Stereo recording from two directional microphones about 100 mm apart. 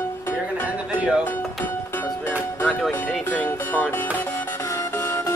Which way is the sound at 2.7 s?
5° right (ahead or behind).